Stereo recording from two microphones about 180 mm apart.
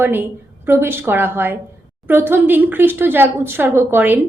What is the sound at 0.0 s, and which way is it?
A woman's voice, 10° right (ahead or behind).